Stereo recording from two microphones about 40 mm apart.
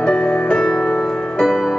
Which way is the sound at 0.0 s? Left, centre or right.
Centre.